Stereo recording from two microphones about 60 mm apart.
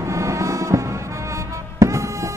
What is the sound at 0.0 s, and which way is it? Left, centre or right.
Music, right.